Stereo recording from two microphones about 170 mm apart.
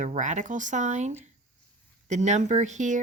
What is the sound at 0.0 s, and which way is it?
A woman's voice, 45° right (ahead or behind).